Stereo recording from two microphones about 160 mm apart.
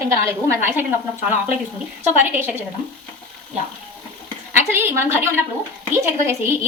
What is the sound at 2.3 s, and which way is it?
Speech, 15° right (ahead or behind).